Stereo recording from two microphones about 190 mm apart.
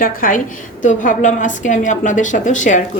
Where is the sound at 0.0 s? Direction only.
45° left (ahead or behind).